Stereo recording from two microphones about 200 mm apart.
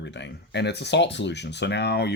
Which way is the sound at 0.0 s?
60° left (ahead or behind).